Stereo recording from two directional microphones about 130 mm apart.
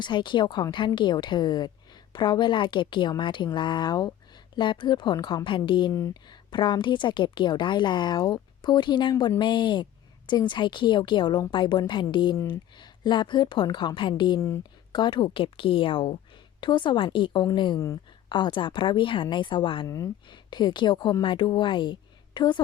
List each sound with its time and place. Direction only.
0.0 s a woman's voice: 35° left (ahead or behind)